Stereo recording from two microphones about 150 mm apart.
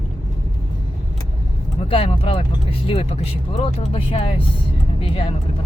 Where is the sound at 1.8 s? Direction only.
40° left (ahead or behind).